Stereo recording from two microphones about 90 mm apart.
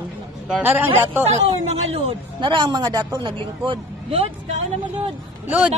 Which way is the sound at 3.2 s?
65° right (ahead or behind).